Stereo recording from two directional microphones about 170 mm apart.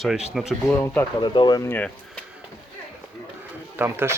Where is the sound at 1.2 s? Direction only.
25° left (ahead or behind).